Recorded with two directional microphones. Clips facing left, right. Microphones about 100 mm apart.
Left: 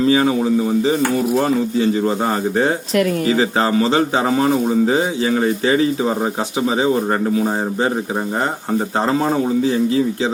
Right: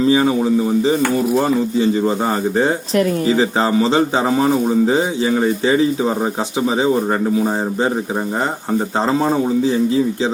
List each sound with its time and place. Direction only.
2.0 s a man's voice: centre (ahead or behind)
2.9 s speech: 30° right (ahead or behind)
3.8 s a man's voice: 5° left (ahead or behind)
6.7 s a man's voice: 5° left (ahead or behind)